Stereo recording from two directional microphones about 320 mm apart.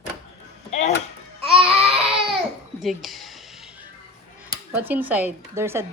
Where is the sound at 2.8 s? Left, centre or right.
Centre.